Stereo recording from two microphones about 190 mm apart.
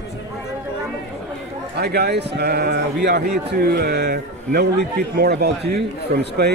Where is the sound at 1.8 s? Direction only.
60° right (ahead or behind).